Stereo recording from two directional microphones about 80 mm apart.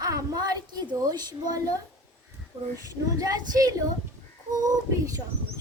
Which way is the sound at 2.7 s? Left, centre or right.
Right.